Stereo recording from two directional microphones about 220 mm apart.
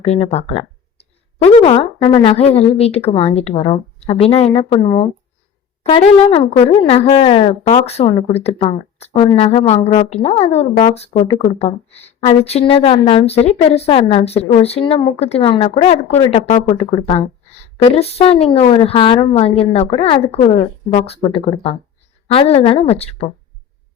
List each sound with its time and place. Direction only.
0.0 s a woman's voice: 30° left (ahead or behind)